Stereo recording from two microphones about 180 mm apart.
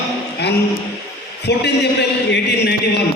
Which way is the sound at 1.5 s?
65° left (ahead or behind).